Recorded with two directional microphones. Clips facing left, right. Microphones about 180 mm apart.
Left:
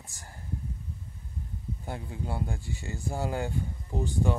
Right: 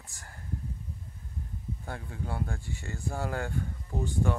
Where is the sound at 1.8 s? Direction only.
20° left (ahead or behind).